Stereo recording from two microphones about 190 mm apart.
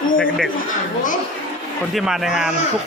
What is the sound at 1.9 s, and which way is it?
Speech, centre (ahead or behind).